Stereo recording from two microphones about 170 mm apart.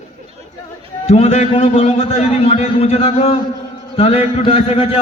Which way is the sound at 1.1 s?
40° left (ahead or behind).